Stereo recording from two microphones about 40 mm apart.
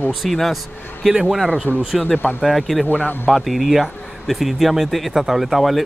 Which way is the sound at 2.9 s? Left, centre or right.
Left.